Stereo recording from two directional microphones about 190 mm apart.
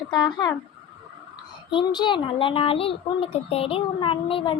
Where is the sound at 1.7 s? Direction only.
25° left (ahead or behind).